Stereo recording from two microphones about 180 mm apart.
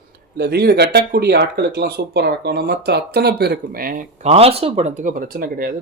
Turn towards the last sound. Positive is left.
turn(degrees=-55)  # may be behind; listen again after turning